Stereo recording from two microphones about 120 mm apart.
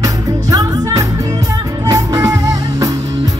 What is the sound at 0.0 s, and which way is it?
Music, 30° right (ahead or behind).